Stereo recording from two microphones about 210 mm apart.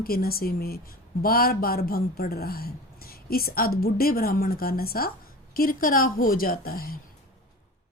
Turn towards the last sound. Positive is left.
turn(degrees=45)  # may be behind; listen again after turning